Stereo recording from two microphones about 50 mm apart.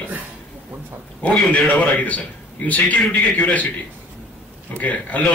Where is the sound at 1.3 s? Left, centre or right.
Left.